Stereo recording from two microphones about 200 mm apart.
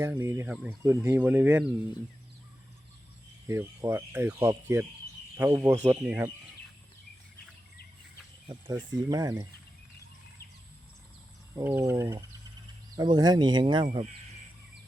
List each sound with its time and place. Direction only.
0.0 s speech: 15° right (ahead or behind)
3.4 s speech: 15° right (ahead or behind)
5.4 s speech: 10° right (ahead or behind)
8.4 s speech: 20° right (ahead or behind)
11.5 s speech: 15° right (ahead or behind)